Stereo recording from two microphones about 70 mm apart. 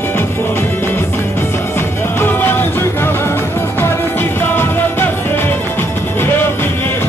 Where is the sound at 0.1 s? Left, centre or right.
Left.